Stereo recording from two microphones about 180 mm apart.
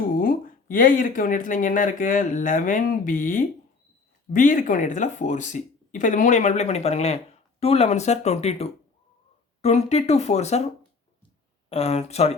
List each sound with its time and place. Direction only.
0.2 s speech: 50° left (ahead or behind)
11.7 s speech: 35° left (ahead or behind)